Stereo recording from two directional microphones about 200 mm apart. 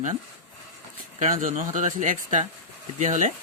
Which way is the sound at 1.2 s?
40° right (ahead or behind).